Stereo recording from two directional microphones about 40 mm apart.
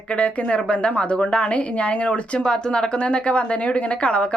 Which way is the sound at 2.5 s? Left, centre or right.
Left.